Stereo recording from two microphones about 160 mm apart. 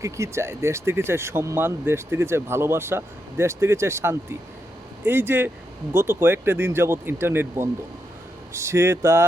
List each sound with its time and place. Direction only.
0.0 s speech: 15° right (ahead or behind)